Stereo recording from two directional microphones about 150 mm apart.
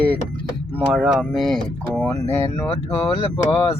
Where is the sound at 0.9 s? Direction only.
5° right (ahead or behind).